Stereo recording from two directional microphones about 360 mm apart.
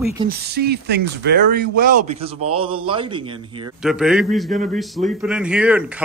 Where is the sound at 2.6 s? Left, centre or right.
Centre.